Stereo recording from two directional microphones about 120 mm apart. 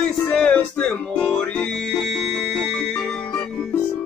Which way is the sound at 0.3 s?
10° left (ahead or behind).